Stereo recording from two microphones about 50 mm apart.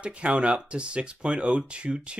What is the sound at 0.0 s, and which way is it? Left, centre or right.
Speech, right.